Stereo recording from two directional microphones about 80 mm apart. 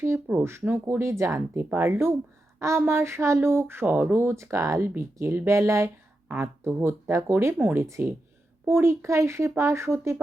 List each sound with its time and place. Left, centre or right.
0.3 s speech: right